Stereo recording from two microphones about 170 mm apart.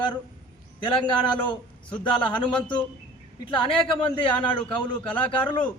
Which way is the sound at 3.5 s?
30° left (ahead or behind).